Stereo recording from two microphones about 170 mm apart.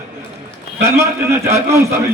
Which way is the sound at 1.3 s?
15° right (ahead or behind).